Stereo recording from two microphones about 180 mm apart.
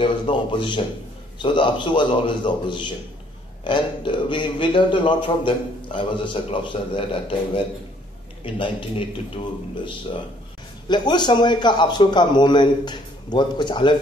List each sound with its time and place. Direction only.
0.0 s speech: 25° left (ahead or behind)
10.9 s speech: 25° left (ahead or behind)